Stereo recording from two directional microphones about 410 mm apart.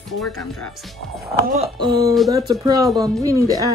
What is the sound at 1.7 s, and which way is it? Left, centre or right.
Speech, centre.